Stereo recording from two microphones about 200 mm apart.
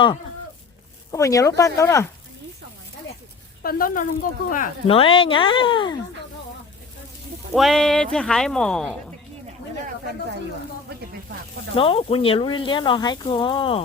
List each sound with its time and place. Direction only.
1.1 s speech: 15° left (ahead or behind)
3.6 s speech: 45° left (ahead or behind)
4.9 s speech: 25° left (ahead or behind)
7.5 s speech: centre (ahead or behind)
11.8 s speech: 30° left (ahead or behind)